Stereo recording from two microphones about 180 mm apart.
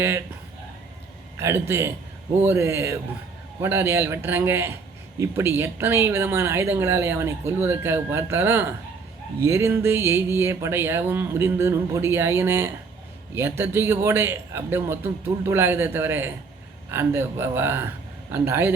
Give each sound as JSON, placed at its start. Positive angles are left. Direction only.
{"t": 1.4, "sound": "speech", "side_deg": -15}